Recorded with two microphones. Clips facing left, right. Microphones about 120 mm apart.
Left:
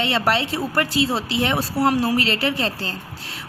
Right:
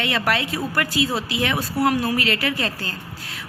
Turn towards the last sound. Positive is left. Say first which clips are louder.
# left 1 dB
turn(degrees=30)  # may be behind; listen again after turning